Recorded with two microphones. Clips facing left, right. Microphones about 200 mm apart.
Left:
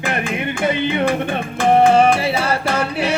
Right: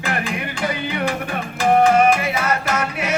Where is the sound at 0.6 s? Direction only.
25° left (ahead or behind).